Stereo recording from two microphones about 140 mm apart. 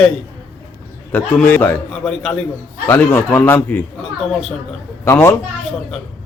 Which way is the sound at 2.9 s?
15° left (ahead or behind).